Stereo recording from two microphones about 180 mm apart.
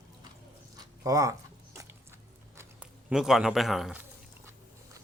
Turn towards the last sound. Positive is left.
turn(degrees=0)  # may be behind; listen again after turning